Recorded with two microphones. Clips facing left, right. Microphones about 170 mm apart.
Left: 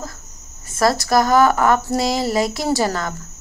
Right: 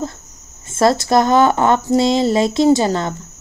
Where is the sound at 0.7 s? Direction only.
25° right (ahead or behind).